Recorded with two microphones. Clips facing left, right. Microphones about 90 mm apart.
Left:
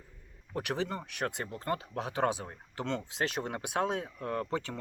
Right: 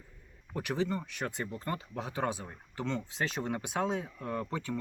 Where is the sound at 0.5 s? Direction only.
65° left (ahead or behind).